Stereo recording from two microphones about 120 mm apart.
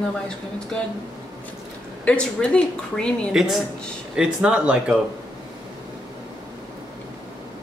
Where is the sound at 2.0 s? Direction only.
10° left (ahead or behind).